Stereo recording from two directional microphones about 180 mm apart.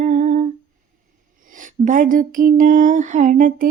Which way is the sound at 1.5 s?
45° right (ahead or behind).